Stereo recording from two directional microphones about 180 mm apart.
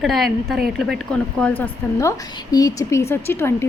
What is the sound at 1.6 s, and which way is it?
Speech, 15° left (ahead or behind).